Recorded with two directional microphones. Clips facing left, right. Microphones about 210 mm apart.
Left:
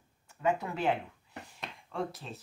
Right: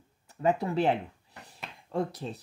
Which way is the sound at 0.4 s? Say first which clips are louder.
Right 5 dB; 35° right (ahead or behind).